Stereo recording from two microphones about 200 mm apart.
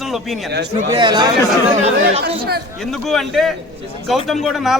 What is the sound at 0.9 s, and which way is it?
Speech, 20° right (ahead or behind).